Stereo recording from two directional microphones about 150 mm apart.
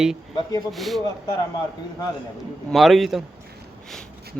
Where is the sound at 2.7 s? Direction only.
Centre (ahead or behind).